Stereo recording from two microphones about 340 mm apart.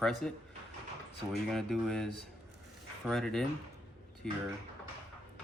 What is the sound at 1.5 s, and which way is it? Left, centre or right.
Speech, centre.